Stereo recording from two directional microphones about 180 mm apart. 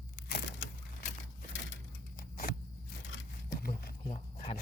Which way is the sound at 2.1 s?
55° left (ahead or behind).